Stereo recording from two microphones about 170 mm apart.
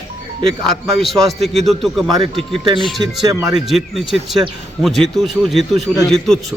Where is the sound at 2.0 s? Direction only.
25° right (ahead or behind).